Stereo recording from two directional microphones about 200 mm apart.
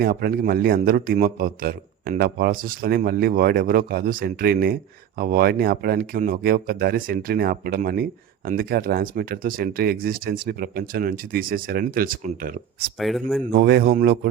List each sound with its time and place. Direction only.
0.0 s a man's voice: 50° right (ahead or behind)
13.0 s speech: centre (ahead or behind)
13.6 s a man's voice: 55° right (ahead or behind)